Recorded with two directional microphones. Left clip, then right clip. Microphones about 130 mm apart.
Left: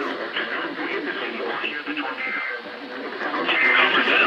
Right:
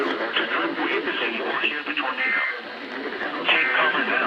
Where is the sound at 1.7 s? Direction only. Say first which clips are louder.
Right 2 dB; 90° right.